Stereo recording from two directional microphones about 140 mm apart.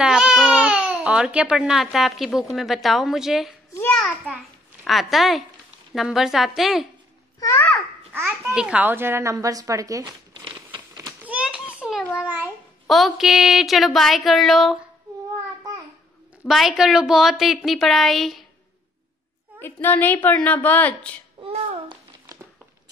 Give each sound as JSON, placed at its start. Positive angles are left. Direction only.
{"t": 0.0, "sound": "speech", "side_deg": -5}
{"t": 4.8, "sound": "speech", "side_deg": 0}
{"t": 7.3, "sound": "a child's voice", "side_deg": 25}
{"t": 8.5, "sound": "speech", "side_deg": -10}
{"t": 10.3, "sound": "a sound", "side_deg": -35}
{"t": 11.2, "sound": "children playing", "side_deg": -10}
{"t": 12.2, "sound": "a child's voice", "side_deg": -10}
{"t": 12.8, "sound": "speech", "side_deg": 0}
{"t": 16.4, "sound": "speech", "side_deg": 0}
{"t": 19.6, "sound": "speech", "side_deg": 15}